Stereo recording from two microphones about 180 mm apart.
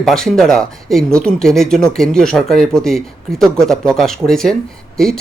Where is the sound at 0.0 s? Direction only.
Centre (ahead or behind).